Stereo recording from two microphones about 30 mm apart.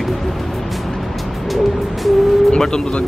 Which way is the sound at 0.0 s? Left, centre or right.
Centre.